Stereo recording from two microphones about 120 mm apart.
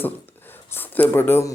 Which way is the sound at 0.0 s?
15° left (ahead or behind).